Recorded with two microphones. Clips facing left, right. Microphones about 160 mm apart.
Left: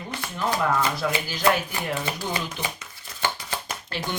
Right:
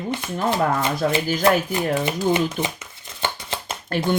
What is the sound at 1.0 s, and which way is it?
Speech, 40° right (ahead or behind).